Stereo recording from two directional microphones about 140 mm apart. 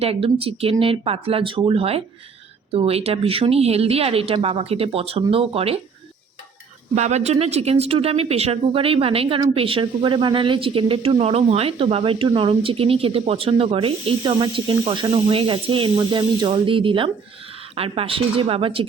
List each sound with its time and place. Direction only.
0.0 s a woman's voice: 45° right (ahead or behind)
6.9 s speech: 55° right (ahead or behind)